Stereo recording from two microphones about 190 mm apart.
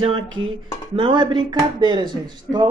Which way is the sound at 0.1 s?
90° right.